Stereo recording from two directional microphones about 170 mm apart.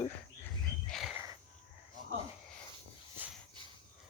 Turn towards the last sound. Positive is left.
turn(degrees=-10)  # may be behind; listen again after turning